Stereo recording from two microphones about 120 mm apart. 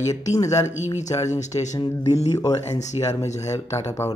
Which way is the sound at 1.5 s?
40° left (ahead or behind).